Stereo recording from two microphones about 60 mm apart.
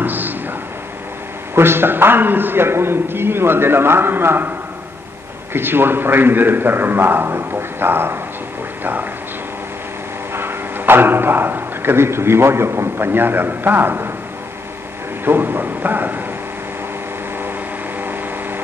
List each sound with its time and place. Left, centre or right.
0.0 s a sound: right
1.5 s a man's voice: right
10.3 s a man's voice: right
15.2 s a man's voice: right